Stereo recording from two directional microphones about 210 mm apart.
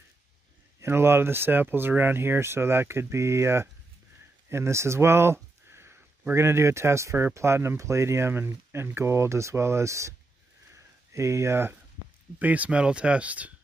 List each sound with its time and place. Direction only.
0.7 s speech: 10° right (ahead or behind)
10.7 s a sound: 15° right (ahead or behind)
12.4 s speech: 5° right (ahead or behind)